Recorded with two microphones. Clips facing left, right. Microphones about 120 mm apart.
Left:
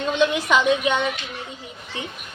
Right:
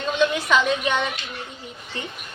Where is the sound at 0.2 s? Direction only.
15° left (ahead or behind).